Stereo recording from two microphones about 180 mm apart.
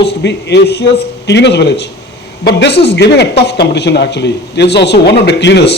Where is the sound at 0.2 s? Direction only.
70° left (ahead or behind).